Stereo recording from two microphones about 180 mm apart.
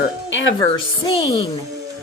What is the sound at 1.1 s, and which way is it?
Speech, 25° left (ahead or behind).